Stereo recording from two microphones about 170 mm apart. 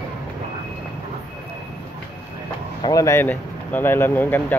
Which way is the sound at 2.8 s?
20° left (ahead or behind).